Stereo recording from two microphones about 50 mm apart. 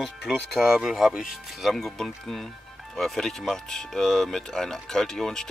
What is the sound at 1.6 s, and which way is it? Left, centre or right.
Speech, centre.